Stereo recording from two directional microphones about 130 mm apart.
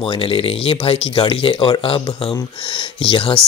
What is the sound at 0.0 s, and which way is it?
Speech, 45° left (ahead or behind).